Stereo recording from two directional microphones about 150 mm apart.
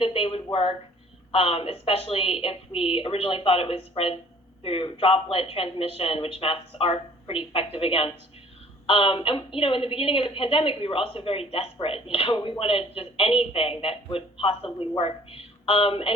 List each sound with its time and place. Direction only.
0.0 s a woman's voice: 40° left (ahead or behind)